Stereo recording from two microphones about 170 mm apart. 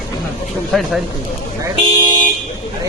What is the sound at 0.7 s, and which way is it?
Speech, centre (ahead or behind).